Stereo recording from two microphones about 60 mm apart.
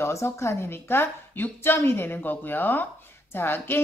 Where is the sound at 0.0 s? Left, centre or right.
Left.